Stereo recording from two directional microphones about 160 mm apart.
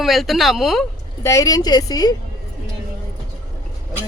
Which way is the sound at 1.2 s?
20° left (ahead or behind).